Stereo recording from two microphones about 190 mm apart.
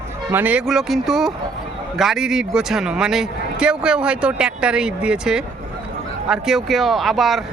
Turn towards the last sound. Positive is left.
turn(degrees=0)  # may be behind; listen again after turning